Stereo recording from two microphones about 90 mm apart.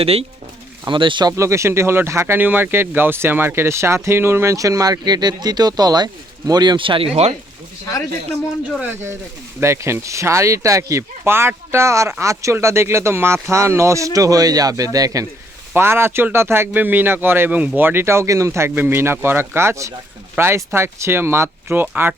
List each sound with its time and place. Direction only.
0.0 s speech: 90° right
0.9 s speech: 65° right (ahead or behind)
1.3 s speech: 30° right (ahead or behind); by 7.2 s 80° right
9.6 s speech: 30° right (ahead or behind)
15.7 s speech: 25° right (ahead or behind)